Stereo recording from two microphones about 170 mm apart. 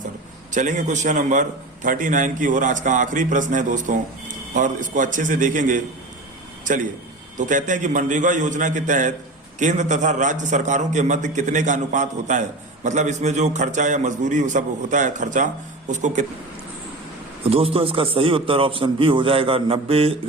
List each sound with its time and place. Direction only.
0.5 s a man's voice: 45° right (ahead or behind)
7.3 s a man's voice: 50° right (ahead or behind)
17.4 s a man's voice: 35° right (ahead or behind)